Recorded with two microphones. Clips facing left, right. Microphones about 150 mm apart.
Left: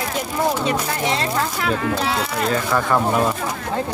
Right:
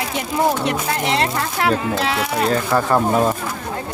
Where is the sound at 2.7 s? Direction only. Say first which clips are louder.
Right 3 dB; 30° right (ahead or behind).